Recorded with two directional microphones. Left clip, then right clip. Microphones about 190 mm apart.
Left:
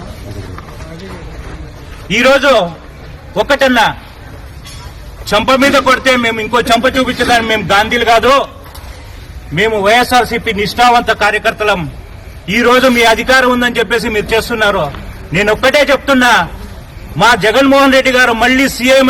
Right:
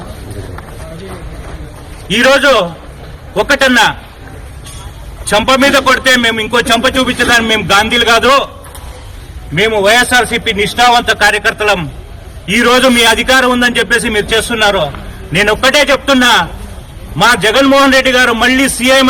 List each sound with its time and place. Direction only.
2.3 s a man's voice: 5° right (ahead or behind)
5.3 s a man's voice: centre (ahead or behind)
9.6 s a man's voice: centre (ahead or behind)